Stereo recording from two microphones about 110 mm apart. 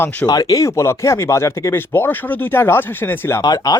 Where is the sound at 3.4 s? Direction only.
35° left (ahead or behind).